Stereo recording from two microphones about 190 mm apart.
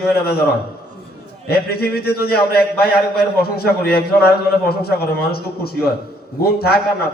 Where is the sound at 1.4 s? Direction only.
55° left (ahead or behind).